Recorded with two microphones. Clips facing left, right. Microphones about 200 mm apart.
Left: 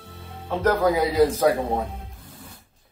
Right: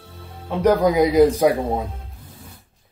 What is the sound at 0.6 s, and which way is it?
Speech, 15° right (ahead or behind).